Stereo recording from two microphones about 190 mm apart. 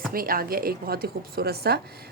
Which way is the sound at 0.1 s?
50° right (ahead or behind).